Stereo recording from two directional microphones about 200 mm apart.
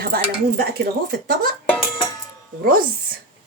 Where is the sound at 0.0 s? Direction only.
50° right (ahead or behind).